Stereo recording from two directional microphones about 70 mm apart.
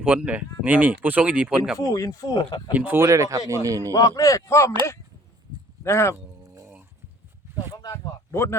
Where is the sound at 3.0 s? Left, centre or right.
Right.